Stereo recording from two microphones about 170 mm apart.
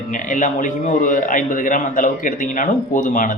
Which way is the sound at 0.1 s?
50° left (ahead or behind).